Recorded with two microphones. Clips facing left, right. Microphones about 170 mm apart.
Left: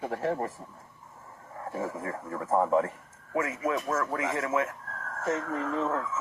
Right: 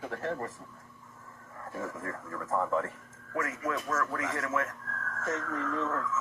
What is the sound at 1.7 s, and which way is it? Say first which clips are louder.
Speech: left 4 dB; 30° left (ahead or behind).